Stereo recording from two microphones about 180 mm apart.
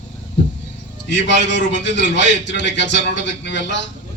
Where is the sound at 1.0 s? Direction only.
80° left.